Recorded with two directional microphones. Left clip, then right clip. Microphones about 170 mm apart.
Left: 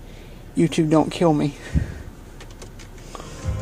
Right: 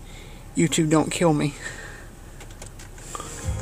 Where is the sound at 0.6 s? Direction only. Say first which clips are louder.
Left 2 dB; 5° right (ahead or behind).